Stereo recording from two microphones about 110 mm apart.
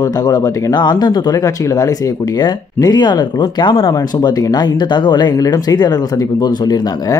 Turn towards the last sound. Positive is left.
turn(degrees=35)  # may be behind; listen again after turning